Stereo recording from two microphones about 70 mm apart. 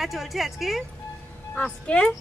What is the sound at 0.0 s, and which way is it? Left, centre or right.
Speech, centre.